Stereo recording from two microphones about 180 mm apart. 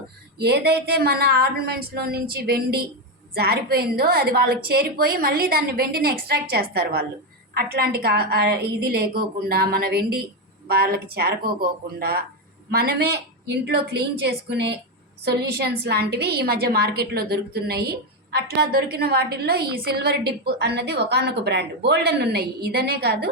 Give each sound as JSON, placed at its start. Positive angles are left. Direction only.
{"t": 0.3, "sound": "a woman's voice", "side_deg": -65}